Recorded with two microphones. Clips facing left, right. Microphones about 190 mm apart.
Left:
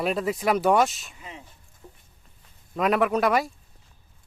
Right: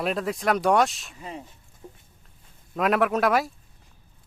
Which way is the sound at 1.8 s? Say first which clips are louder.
Right 4 dB; 20° right (ahead or behind).